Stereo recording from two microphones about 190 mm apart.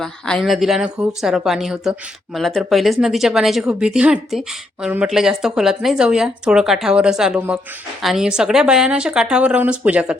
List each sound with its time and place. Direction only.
0.0 s speech: centre (ahead or behind)